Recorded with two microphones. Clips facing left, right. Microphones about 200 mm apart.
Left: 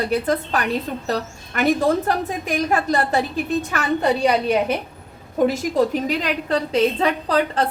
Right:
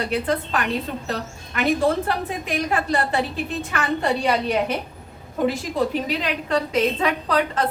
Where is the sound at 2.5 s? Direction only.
40° left (ahead or behind).